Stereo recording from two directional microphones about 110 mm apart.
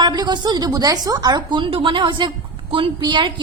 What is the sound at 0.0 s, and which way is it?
A woman's voice, 40° right (ahead or behind).